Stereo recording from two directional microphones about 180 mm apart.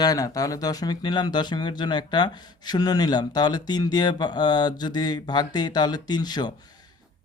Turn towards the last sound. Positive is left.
turn(degrees=25)  # may be behind; listen again after turning